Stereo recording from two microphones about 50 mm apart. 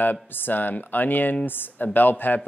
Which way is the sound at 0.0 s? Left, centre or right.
Left.